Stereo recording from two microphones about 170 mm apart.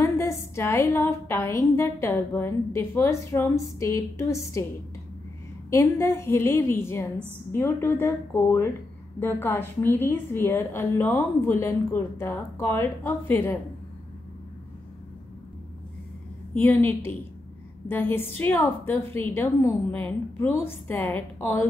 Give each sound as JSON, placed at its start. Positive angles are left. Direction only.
{"t": 0.0, "sound": "a woman's voice", "side_deg": 15}
{"t": 5.7, "sound": "a woman's voice", "side_deg": 15}
{"t": 17.8, "sound": "a woman's voice", "side_deg": 15}